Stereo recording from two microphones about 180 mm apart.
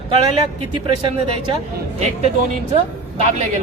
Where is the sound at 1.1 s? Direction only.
35° right (ahead or behind).